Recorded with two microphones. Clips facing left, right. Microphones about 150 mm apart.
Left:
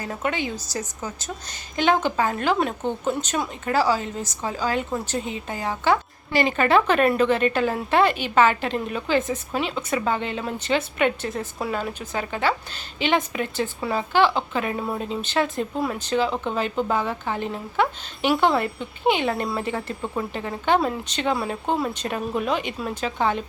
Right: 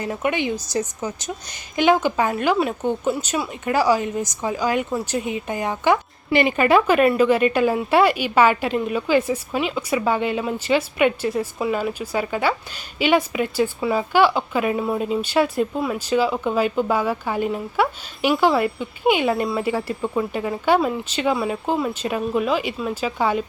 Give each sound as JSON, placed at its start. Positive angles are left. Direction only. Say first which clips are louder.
{"t": 0.0, "sound": "speech", "louder": "right 4 dB", "side_deg": -15}